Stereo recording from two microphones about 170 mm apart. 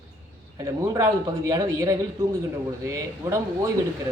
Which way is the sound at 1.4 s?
20° right (ahead or behind).